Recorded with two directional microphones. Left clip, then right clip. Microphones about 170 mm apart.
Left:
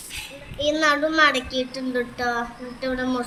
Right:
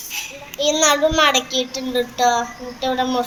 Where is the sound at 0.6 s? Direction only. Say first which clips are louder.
Right 4 dB; 30° left (ahead or behind).